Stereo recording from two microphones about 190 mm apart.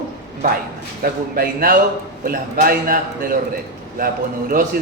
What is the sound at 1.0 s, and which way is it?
A man's voice, 50° right (ahead or behind).